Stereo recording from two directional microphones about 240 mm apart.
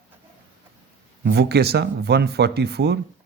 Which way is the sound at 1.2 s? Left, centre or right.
Right.